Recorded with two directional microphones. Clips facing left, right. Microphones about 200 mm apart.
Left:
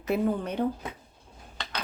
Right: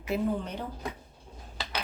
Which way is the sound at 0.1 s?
55° left (ahead or behind).